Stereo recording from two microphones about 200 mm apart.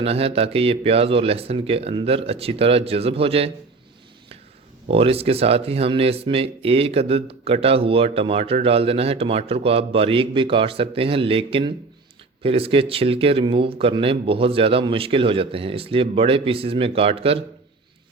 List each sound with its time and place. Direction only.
0.0 s speech: 30° right (ahead or behind)
4.9 s speech: 30° right (ahead or behind)